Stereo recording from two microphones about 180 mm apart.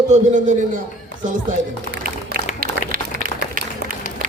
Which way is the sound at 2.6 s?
55° right (ahead or behind).